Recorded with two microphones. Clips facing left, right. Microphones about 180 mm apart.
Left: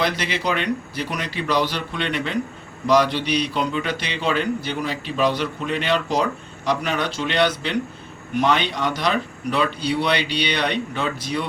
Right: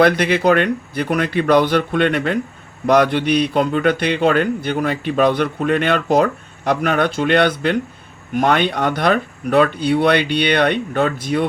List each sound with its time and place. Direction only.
0.0 s a man's voice: 55° right (ahead or behind)